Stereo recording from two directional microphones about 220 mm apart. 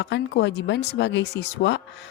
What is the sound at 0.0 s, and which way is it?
Speech, 50° left (ahead or behind).